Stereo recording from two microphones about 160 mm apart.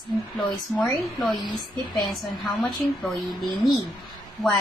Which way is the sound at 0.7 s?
5° left (ahead or behind).